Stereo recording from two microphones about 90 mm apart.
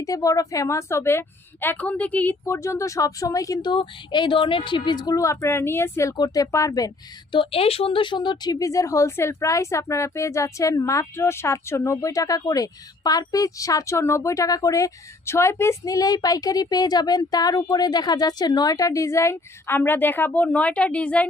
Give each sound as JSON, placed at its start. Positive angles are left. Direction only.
{"t": 0.0, "sound": "a woman's voice", "side_deg": 40}
{"t": 1.6, "sound": "a woman's voice", "side_deg": 15}
{"t": 2.4, "sound": "a woman's voice", "side_deg": 35}
{"t": 3.6, "sound": "speech", "side_deg": 60}
{"t": 5.1, "sound": "a woman's voice", "side_deg": 35}
{"t": 6.1, "sound": "a woman's voice", "side_deg": 45}
{"t": 7.3, "sound": "speech", "side_deg": 80}
{"t": 8.5, "sound": "a woman's voice", "side_deg": 35}